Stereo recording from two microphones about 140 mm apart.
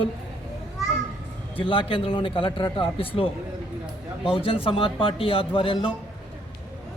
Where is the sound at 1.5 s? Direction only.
40° left (ahead or behind).